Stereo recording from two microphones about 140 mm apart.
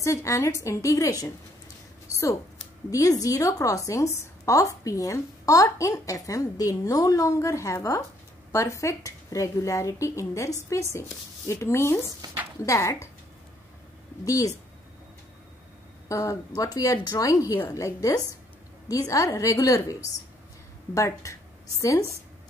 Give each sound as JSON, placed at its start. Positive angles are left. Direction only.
{"t": 0.0, "sound": "a woman's voice", "side_deg": 20}
{"t": 2.9, "sound": "a woman's voice", "side_deg": 25}
{"t": 14.2, "sound": "a woman's voice", "side_deg": 25}
{"t": 16.1, "sound": "a woman's voice", "side_deg": 25}